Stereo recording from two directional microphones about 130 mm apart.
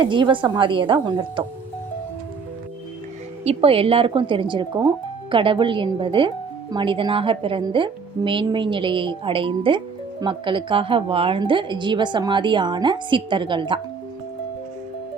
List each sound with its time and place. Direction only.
0.0 s speech: 40° right (ahead or behind)
3.4 s speech: 50° right (ahead or behind)